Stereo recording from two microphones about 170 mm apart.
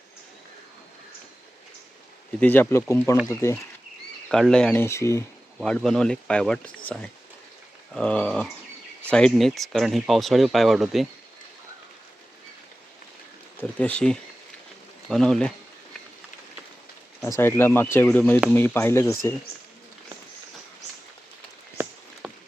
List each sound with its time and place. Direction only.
2.4 s speech: 10° left (ahead or behind)
4.3 s speech: 5° left (ahead or behind)
5.5 s speech: 5° left (ahead or behind)
13.6 s speech: 10° left (ahead or behind)
17.2 s speech: 15° left (ahead or behind)